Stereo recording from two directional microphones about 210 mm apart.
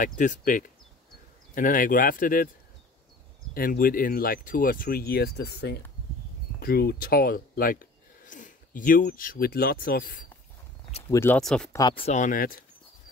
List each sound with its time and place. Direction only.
0.0 s speech: 40° left (ahead or behind)
3.5 s speech: 45° left (ahead or behind)
11.1 s speech: 10° left (ahead or behind)
11.7 s speech: 20° left (ahead or behind); by 12.5 s 40° left (ahead or behind)